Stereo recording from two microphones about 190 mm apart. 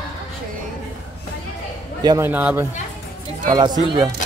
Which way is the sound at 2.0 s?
20° right (ahead or behind).